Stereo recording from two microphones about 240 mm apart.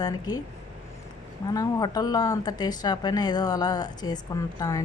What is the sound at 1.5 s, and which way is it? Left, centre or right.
Speech, centre.